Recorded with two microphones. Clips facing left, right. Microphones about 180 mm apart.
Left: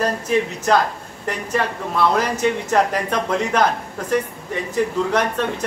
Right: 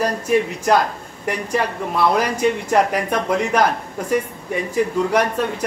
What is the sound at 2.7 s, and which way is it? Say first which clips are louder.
Speech: right 1 dB; 10° right (ahead or behind).